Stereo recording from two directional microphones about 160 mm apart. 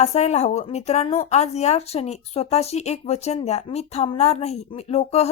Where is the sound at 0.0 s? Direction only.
40° left (ahead or behind).